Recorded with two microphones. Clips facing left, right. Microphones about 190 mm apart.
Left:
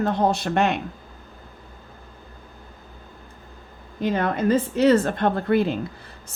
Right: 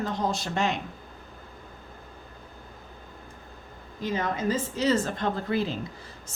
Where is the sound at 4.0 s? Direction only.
60° left (ahead or behind).